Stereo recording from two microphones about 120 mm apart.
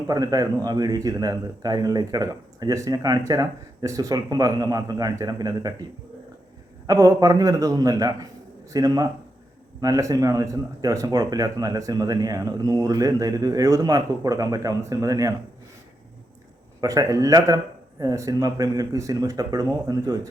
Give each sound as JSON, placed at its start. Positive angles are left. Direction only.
{"t": 0.1, "sound": "speech", "side_deg": -30}
{"t": 6.8, "sound": "a man's voice", "side_deg": -30}
{"t": 16.8, "sound": "a man's voice", "side_deg": -30}